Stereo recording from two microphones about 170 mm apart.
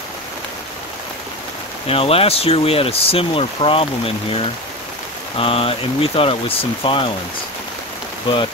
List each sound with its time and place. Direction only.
1.9 s speech: 35° left (ahead or behind)
8.3 s speech: 30° left (ahead or behind)